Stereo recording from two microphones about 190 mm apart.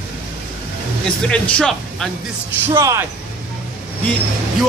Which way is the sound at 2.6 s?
15° right (ahead or behind).